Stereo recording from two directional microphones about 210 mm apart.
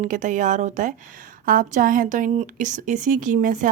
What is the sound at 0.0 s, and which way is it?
A woman's voice, 35° right (ahead or behind).